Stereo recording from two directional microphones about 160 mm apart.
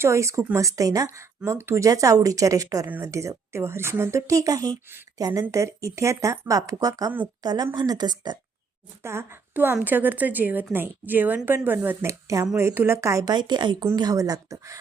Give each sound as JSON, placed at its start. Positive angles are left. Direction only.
{"t": 0.0, "sound": "a woman's voice", "side_deg": -20}
{"t": 9.0, "sound": "a woman's voice", "side_deg": -15}